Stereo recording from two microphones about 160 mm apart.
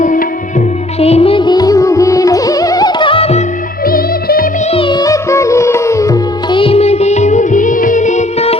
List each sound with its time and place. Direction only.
0.0 s music: 55° left (ahead or behind)
0.9 s music: 40° left (ahead or behind)
3.8 s music: 65° left (ahead or behind)
4.7 s music: 30° left (ahead or behind)
6.6 s music of bollywood: 40° left (ahead or behind)